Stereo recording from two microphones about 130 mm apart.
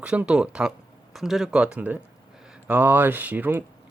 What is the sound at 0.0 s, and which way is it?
Speech, 10° right (ahead or behind).